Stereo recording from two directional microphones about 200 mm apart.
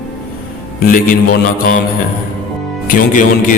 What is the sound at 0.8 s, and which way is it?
A man's voice, 45° left (ahead or behind).